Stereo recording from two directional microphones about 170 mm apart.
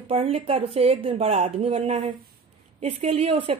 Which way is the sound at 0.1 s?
35° right (ahead or behind).